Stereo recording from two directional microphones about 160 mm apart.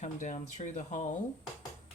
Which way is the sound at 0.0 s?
50° left (ahead or behind).